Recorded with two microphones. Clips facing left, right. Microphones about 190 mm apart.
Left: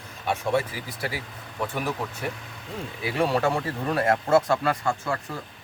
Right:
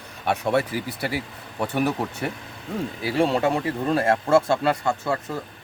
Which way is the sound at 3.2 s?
20° right (ahead or behind).